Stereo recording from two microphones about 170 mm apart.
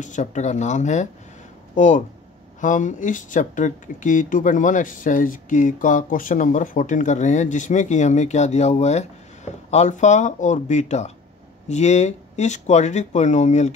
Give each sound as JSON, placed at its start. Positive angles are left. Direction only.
{"t": 0.0, "sound": "speech", "side_deg": 45}